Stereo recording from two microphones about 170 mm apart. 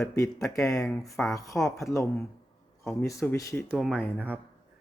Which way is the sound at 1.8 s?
Centre (ahead or behind).